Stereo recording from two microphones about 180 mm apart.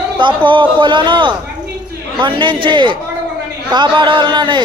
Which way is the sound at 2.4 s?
25° right (ahead or behind).